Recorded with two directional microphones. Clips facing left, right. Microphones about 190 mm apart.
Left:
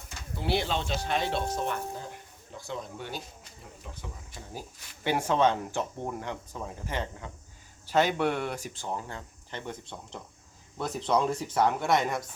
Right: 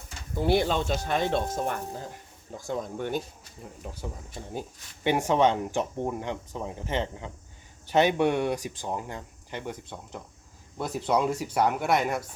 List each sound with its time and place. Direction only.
0.3 s speech: 45° right (ahead or behind)
5.0 s speech: 15° right (ahead or behind)
10.8 s speech: 10° right (ahead or behind)